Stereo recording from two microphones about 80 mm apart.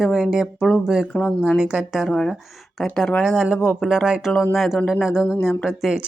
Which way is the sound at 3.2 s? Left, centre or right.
Centre.